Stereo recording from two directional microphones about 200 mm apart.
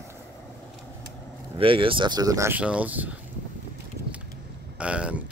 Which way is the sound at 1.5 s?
25° right (ahead or behind).